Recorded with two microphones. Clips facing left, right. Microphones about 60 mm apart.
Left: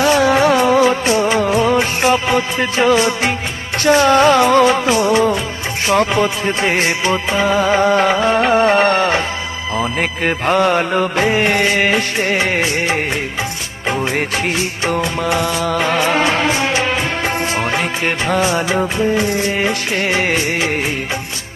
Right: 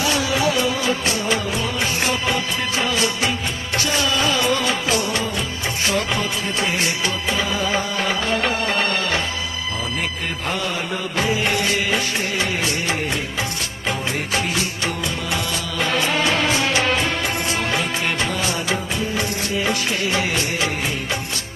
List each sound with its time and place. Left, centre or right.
0.0 s music: left
4.9 s music: left
5.9 s music: left
7.4 s music: left
8.2 s music: left
10.0 s music: left
14.2 s music: left
14.5 s music: left
16.0 s music: left